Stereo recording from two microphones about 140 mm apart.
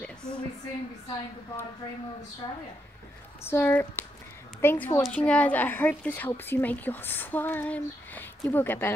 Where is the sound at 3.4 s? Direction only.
15° left (ahead or behind).